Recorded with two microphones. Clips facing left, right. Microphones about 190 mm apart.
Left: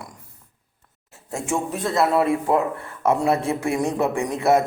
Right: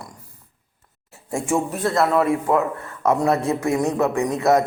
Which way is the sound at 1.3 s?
5° right (ahead or behind).